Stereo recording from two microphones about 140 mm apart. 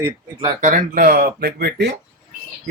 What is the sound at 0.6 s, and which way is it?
Speech, 65° right (ahead or behind).